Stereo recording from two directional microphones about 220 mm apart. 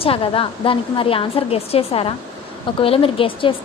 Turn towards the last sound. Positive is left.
turn(degrees=25)  # may be behind; listen again after turning